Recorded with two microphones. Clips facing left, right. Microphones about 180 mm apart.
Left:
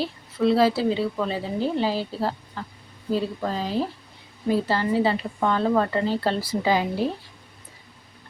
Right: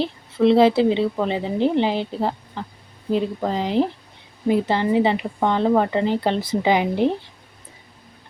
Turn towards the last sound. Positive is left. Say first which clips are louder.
# right 4 dB
turn(degrees=-20)  # may be behind; listen again after turning